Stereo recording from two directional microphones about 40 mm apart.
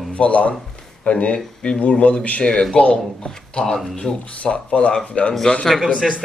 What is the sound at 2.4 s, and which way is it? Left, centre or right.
Speech, left.